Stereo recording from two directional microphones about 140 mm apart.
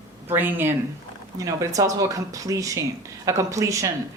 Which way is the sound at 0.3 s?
15° right (ahead or behind).